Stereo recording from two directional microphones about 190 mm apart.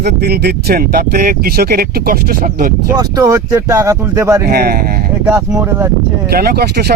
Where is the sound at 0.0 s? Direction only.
55° right (ahead or behind).